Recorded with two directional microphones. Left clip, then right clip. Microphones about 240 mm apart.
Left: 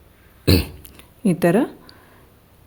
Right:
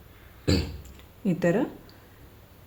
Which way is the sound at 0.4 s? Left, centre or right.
Left.